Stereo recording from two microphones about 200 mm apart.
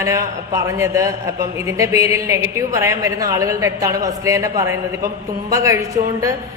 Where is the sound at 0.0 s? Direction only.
15° right (ahead or behind).